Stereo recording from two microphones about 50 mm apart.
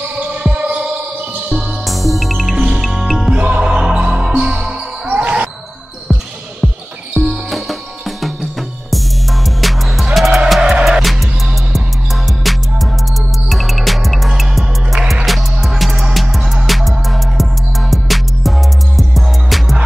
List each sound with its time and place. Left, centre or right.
0.4 s basketball bounce: right
1.5 s music: centre
3.3 s music: right
3.6 s music: centre
5.0 s music: right
6.6 s basketball bounce: centre
7.2 s music: centre